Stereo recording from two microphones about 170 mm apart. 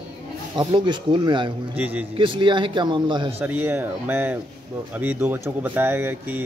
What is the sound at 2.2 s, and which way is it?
Speech, 30° right (ahead or behind).